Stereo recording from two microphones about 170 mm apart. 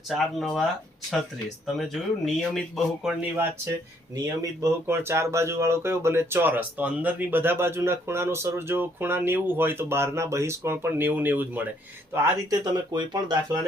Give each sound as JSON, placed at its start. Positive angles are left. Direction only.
{"t": 0.1, "sound": "speech", "side_deg": 0}
{"t": 4.6, "sound": "speech", "side_deg": -15}